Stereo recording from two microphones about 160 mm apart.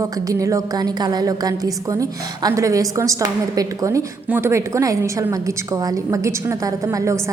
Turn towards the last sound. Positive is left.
turn(degrees=-20)  # may be behind; listen again after turning